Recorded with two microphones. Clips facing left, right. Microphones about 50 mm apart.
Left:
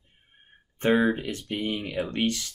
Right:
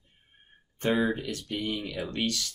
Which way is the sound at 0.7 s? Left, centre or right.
Left.